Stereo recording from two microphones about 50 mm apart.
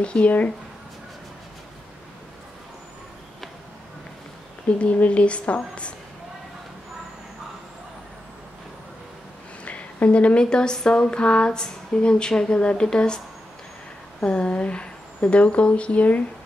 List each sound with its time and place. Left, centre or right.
0.0 s speech: left
4.7 s speech: left
9.7 s speech: left
14.2 s speech: left